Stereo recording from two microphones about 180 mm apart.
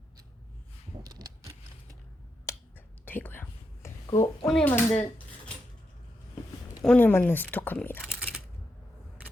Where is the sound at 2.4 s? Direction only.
15° left (ahead or behind).